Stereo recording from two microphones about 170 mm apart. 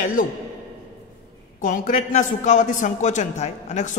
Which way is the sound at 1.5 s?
50° left (ahead or behind).